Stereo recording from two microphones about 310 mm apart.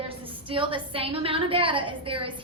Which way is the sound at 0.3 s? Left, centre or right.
Centre.